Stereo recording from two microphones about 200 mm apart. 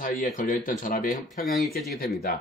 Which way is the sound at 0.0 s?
40° left (ahead or behind).